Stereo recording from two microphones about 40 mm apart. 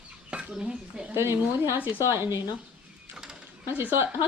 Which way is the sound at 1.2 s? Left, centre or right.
Right.